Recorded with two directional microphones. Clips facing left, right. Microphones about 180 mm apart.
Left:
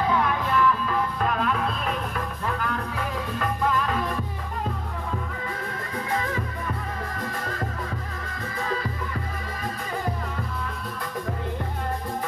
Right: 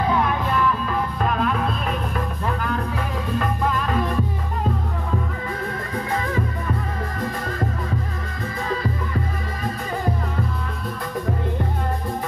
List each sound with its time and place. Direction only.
0.1 s music: 25° right (ahead or behind)